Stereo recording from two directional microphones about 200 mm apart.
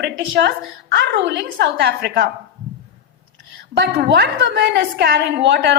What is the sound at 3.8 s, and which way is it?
A woman's voice, 55° right (ahead or behind).